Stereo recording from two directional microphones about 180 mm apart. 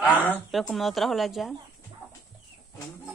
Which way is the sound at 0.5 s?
Centre (ahead or behind).